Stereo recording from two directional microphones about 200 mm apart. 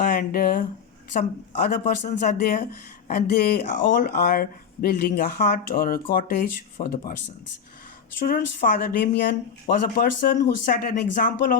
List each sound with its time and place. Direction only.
0.0 s speech: 45° left (ahead or behind)
8.2 s speech: 45° left (ahead or behind)